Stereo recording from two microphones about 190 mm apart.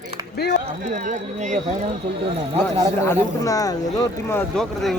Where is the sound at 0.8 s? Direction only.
40° right (ahead or behind).